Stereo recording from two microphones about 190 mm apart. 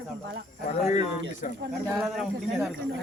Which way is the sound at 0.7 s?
35° left (ahead or behind).